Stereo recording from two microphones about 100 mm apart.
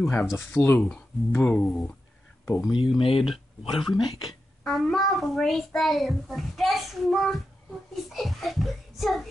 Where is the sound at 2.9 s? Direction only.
65° left (ahead or behind).